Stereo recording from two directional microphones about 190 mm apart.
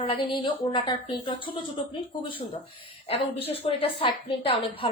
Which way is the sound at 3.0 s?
30° left (ahead or behind).